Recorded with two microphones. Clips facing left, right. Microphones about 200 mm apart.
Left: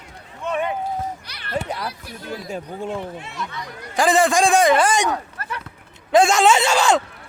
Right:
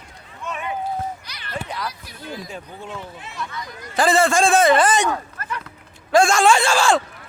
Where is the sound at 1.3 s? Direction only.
60° left (ahead or behind).